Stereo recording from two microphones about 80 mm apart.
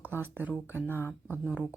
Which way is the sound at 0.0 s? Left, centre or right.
Right.